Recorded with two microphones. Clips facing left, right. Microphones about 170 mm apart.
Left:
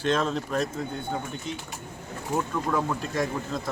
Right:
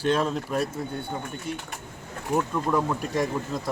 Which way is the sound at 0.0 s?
10° right (ahead or behind).